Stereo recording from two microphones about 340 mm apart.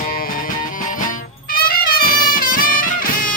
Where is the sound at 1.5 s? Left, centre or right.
Left.